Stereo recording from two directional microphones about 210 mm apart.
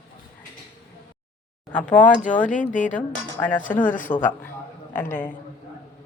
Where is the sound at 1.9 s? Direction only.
35° left (ahead or behind).